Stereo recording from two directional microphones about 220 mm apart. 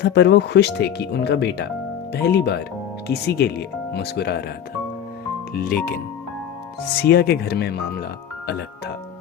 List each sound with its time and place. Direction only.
0.0 s speech: 50° left (ahead or behind)
5.5 s speech: 40° left (ahead or behind)
7.0 s speech: 45° left (ahead or behind)